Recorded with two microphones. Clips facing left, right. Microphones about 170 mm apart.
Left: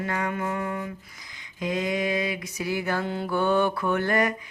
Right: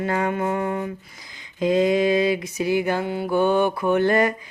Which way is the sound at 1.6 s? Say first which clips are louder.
Right 8 dB; 30° right (ahead or behind).